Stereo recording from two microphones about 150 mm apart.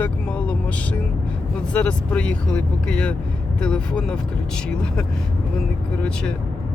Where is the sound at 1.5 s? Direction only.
5° left (ahead or behind).